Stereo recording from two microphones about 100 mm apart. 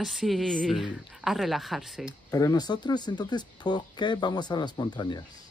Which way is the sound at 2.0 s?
35° left (ahead or behind).